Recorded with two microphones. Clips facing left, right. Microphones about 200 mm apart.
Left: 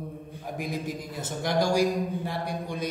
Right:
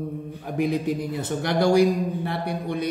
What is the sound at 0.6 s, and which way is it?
A man's voice, 65° right (ahead or behind).